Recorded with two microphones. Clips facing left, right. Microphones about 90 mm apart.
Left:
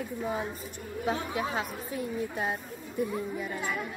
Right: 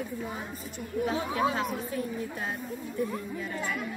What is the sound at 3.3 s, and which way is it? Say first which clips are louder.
Speech: even; 10° left (ahead or behind).